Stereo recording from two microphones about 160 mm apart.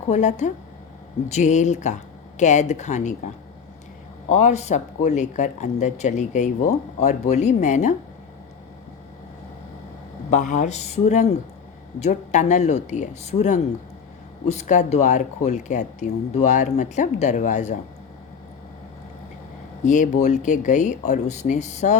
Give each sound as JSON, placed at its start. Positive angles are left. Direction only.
{"t": 0.1, "sound": "speech", "side_deg": 45}
{"t": 4.3, "sound": "speech", "side_deg": 45}
{"t": 10.3, "sound": "speech", "side_deg": 50}
{"t": 19.8, "sound": "speech", "side_deg": 50}